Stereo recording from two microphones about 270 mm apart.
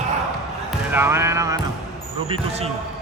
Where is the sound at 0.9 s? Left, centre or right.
Centre.